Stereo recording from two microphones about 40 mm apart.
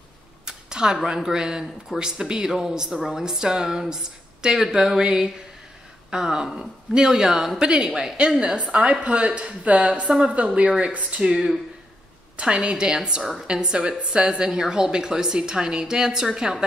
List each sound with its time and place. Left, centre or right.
0.5 s a sound: centre
0.9 s a man's voice: centre
8.5 s a woman's voice: right
12.4 s a woman's voice: right